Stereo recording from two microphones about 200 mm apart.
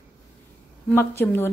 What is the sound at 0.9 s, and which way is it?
Speech, 10° left (ahead or behind).